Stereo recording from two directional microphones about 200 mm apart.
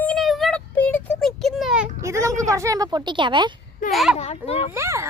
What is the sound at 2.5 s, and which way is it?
A woman's voice, 15° right (ahead or behind).